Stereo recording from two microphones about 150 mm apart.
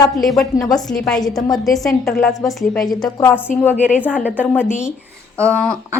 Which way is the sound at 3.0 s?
25° left (ahead or behind).